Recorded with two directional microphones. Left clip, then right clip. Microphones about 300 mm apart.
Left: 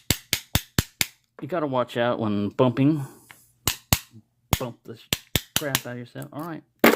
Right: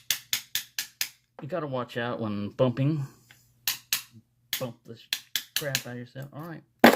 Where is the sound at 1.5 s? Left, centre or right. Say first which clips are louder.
Left 7 dB; left.